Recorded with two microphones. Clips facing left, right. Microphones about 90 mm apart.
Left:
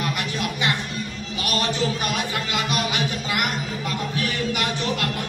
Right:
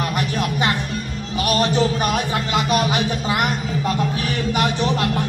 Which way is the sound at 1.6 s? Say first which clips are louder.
Right 5 dB; 40° right (ahead or behind).